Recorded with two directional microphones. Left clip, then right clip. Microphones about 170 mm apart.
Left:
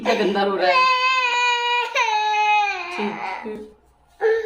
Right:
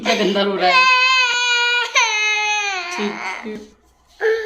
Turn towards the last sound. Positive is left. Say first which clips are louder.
# right 1 dB
turn(degrees=10)  # may be behind; listen again after turning